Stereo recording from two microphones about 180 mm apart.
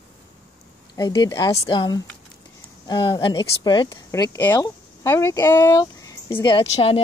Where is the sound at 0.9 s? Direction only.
20° left (ahead or behind).